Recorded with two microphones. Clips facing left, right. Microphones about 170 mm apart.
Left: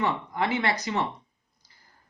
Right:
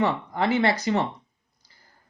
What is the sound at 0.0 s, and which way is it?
Speech, 30° right (ahead or behind).